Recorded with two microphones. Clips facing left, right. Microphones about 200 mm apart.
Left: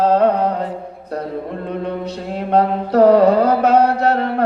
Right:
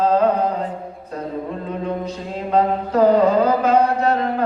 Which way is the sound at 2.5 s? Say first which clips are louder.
Left 3 dB; 70° left (ahead or behind).